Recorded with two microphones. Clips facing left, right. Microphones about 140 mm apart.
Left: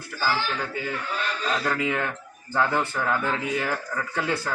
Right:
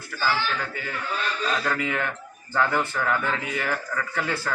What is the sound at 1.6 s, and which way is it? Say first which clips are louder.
A man's voice: left 1 dB; 15° left (ahead or behind).